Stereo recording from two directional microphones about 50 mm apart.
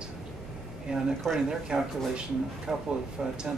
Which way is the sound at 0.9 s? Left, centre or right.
Centre.